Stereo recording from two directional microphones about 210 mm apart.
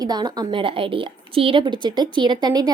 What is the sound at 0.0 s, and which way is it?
A woman's voice, 20° right (ahead or behind).